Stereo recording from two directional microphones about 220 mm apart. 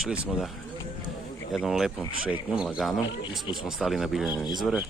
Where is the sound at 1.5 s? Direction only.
Centre (ahead or behind).